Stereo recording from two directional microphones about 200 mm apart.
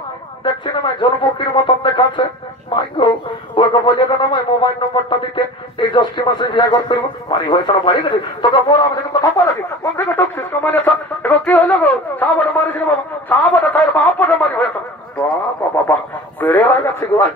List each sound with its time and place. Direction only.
0.4 s speech: 25° left (ahead or behind)
15.9 s speech: 10° left (ahead or behind)